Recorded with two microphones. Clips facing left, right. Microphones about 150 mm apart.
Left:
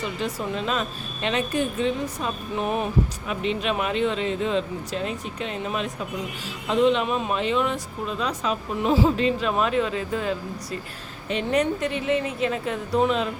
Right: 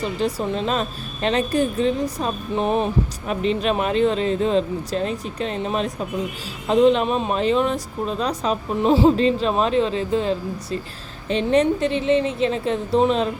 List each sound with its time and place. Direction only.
0.2 s a woman's voice: 35° right (ahead or behind)